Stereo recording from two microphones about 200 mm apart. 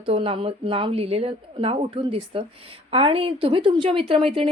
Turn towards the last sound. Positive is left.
turn(degrees=-25)  # may be behind; listen again after turning